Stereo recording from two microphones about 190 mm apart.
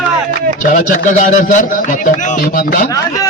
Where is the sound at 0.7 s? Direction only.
45° left (ahead or behind).